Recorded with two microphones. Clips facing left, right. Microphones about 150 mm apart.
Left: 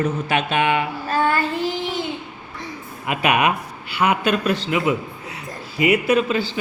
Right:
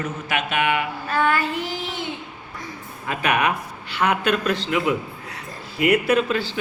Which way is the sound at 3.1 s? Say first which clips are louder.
Left 3 dB; 15° left (ahead or behind).